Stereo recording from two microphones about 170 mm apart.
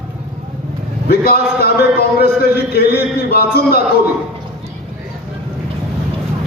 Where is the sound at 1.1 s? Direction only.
65° left (ahead or behind).